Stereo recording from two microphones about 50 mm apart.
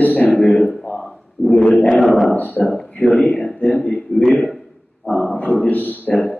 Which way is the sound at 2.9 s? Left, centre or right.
Left.